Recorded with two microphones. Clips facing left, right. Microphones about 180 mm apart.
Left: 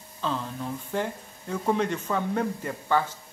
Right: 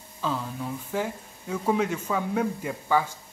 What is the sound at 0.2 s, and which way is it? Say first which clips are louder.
Speech: even; 5° right (ahead or behind).